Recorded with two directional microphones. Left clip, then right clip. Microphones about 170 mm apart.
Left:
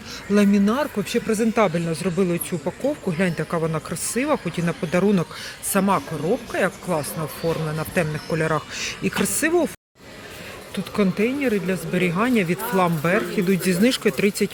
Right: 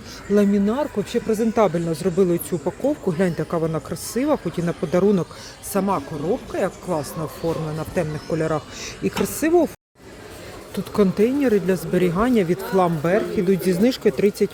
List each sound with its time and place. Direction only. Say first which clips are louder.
0.3 s speech: right 1 dB; 10° right (ahead or behind)
5.7 s speech: left 1 dB; centre (ahead or behind)
10.9 s speech: right 4 dB; 30° right (ahead or behind)